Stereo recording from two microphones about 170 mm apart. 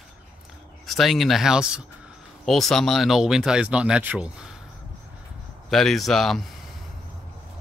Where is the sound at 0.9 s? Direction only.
Centre (ahead or behind).